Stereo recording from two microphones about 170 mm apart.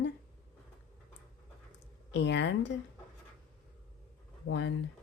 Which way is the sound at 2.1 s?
90° left.